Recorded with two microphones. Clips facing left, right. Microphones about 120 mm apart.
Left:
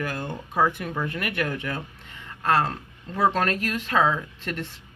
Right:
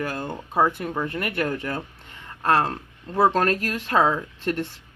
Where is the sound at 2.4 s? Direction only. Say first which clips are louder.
Right 2 dB; 45° right (ahead or behind).